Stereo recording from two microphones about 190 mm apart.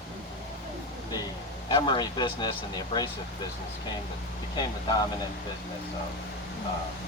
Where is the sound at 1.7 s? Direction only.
25° left (ahead or behind).